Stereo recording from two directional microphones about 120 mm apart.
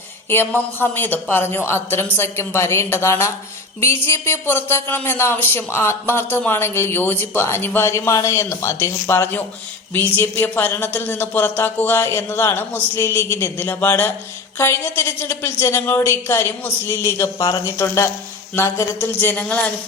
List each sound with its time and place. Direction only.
0.3 s speech: 20° left (ahead or behind)